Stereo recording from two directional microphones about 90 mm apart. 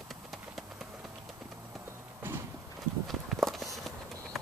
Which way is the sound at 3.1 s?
Centre (ahead or behind).